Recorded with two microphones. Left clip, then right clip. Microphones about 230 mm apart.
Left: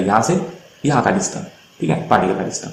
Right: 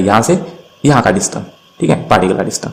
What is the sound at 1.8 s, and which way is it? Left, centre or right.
Speech, right.